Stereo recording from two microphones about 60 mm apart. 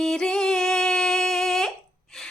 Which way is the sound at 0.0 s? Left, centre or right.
Centre.